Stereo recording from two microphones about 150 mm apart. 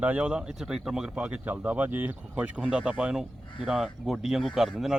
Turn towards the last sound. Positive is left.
turn(degrees=0)  # may be behind; listen again after turning